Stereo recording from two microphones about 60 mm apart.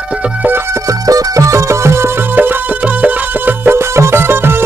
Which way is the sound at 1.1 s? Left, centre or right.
Right.